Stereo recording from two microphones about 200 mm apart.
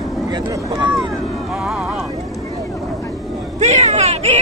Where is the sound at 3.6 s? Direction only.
35° right (ahead or behind).